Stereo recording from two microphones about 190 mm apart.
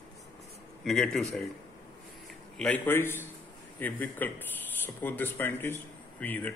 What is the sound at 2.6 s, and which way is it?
Speech, 5° left (ahead or behind).